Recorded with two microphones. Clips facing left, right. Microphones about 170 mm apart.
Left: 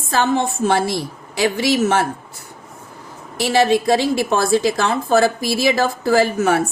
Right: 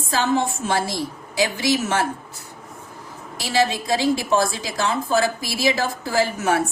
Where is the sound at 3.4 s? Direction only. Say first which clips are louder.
Left 6 dB; 60° left (ahead or behind).